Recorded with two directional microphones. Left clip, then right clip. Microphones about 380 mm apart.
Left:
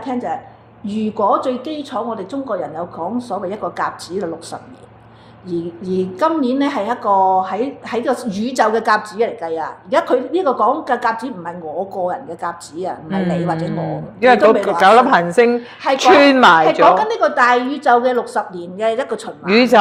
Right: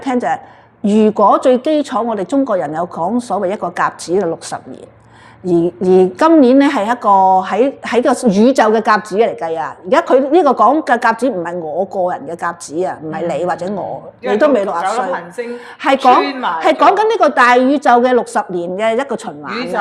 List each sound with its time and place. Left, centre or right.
0.0 s a woman's voice: right
14.8 s a woman's voice: left
16.9 s a woman's voice: right
19.5 s a woman's voice: left